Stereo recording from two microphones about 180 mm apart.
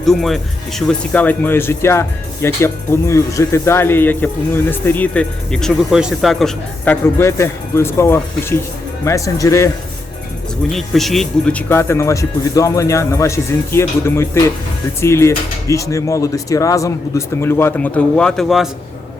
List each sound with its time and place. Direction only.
0.0 s speech: centre (ahead or behind); by 9.6 s 15° left (ahead or behind)
10.7 s speech: centre (ahead or behind)